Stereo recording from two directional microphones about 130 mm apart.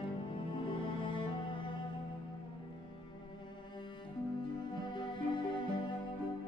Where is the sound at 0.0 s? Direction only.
40° left (ahead or behind).